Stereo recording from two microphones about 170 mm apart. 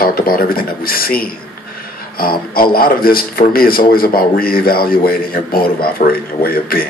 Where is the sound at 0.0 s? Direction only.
60° left (ahead or behind).